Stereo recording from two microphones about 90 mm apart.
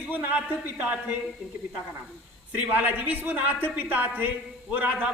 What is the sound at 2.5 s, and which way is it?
A man's voice, 20° right (ahead or behind).